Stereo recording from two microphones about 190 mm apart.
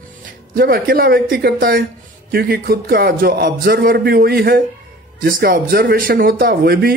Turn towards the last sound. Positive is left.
turn(degrees=-55)  # may be behind; listen again after turning